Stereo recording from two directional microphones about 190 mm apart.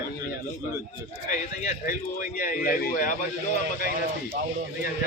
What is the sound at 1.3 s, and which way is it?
A man's voice, 40° left (ahead or behind).